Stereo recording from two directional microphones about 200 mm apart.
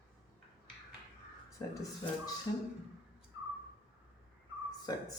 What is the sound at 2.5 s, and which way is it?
Speech, 25° left (ahead or behind).